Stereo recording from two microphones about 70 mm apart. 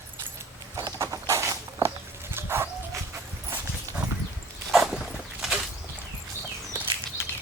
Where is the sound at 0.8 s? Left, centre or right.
Right.